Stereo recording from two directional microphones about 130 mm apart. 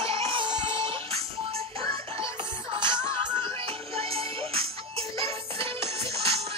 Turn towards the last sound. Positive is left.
turn(degrees=-50)  # may be behind; listen again after turning